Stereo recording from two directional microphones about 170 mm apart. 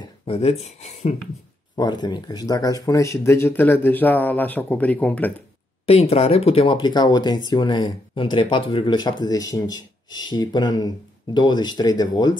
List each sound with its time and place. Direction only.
0.0 s speech: 35° left (ahead or behind)
1.8 s speech: 25° left (ahead or behind); by 5.3 s 10° left (ahead or behind)
5.9 s speech: 35° left (ahead or behind)